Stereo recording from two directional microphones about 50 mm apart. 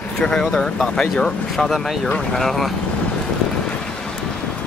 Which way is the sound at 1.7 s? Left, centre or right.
Centre.